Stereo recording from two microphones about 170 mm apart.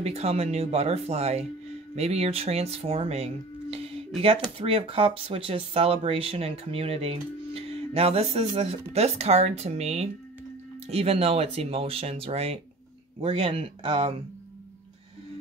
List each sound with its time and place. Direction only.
0.0 s speech: 35° right (ahead or behind)
3.7 s music: 35° right (ahead or behind)
4.6 s speech: 35° right (ahead or behind)